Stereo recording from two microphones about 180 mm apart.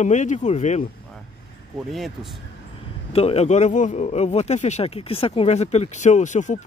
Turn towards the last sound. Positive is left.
turn(degrees=45)  # may be behind; listen again after turning